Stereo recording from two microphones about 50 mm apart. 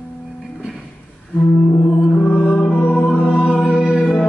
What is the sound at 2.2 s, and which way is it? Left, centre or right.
Music, left.